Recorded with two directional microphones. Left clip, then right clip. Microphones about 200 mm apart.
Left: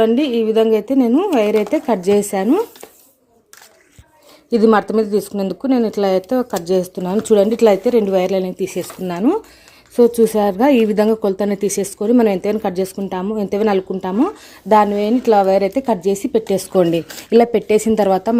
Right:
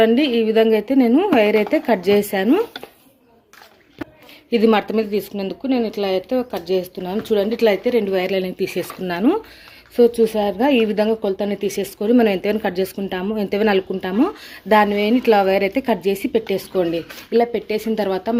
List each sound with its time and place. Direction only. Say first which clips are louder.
0.0 s a woman's voice: left 1 dB; 15° left (ahead or behind)
4.5 s speech: left 3 dB; 30° left (ahead or behind)
9.9 s speech: left 2 dB; 30° left (ahead or behind)
16.5 s speech: left 5 dB; 40° left (ahead or behind)